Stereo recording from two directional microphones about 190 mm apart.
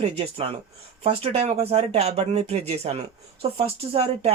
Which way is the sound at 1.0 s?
30° right (ahead or behind).